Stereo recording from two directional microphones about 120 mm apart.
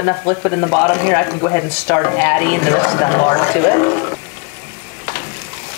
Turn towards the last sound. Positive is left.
turn(degrees=25)  # may be behind; listen again after turning